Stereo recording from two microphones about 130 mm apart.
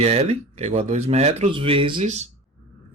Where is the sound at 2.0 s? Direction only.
60° right (ahead or behind).